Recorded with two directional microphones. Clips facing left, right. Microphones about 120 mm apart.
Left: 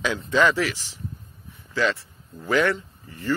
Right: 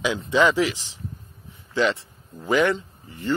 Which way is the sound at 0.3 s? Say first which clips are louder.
Right 1 dB; 15° right (ahead or behind).